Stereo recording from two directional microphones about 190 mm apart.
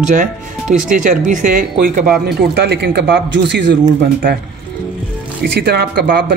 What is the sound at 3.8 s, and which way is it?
Speech, 50° right (ahead or behind).